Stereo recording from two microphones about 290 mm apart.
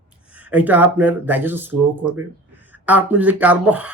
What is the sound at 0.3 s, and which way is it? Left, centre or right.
Speech, centre.